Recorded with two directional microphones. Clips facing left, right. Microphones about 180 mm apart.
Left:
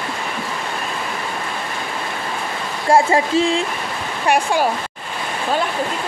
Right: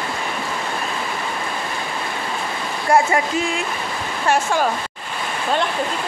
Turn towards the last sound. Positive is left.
turn(degrees=15)  # may be behind; listen again after turning